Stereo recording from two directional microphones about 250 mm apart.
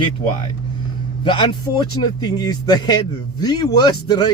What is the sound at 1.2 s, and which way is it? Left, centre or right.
Speech, centre.